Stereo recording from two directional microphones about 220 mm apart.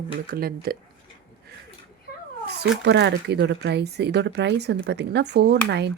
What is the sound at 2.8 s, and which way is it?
Speech, 50° right (ahead or behind).